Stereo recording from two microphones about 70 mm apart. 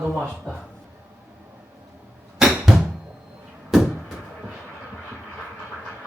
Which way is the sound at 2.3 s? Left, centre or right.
Centre.